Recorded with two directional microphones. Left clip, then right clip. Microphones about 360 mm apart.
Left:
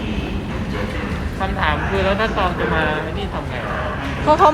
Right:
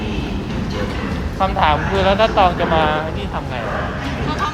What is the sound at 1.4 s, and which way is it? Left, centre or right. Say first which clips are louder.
Speech: right 5 dB; right.